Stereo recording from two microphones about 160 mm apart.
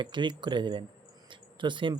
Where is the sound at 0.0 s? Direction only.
30° right (ahead or behind).